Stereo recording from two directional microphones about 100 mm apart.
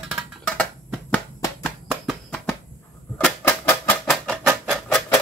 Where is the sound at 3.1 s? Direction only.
15° left (ahead or behind).